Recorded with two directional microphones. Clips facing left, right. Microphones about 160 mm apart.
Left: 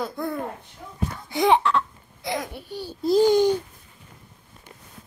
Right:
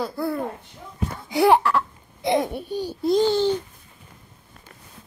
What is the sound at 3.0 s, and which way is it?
Babbling, centre (ahead or behind).